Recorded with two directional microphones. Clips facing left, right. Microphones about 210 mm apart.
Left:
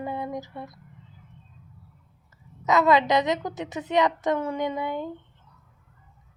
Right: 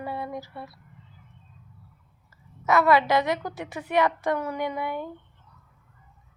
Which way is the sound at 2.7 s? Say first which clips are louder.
Even; 20° left (ahead or behind).